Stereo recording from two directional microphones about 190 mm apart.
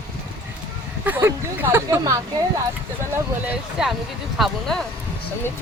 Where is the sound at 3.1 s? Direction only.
10° right (ahead or behind).